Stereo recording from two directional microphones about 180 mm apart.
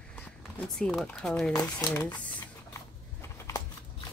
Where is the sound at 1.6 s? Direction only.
20° left (ahead or behind).